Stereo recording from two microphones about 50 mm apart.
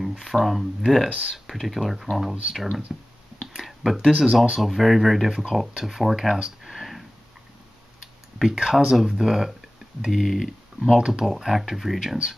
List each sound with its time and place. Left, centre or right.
0.0 s speech: centre
3.5 s a sound: centre
4.2 s speech: centre
8.4 s speech: centre
10.9 s speech: centre